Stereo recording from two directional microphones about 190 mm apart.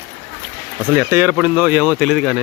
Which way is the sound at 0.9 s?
10° right (ahead or behind).